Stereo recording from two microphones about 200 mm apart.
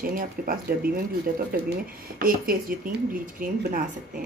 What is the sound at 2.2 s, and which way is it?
Speech, 45° right (ahead or behind).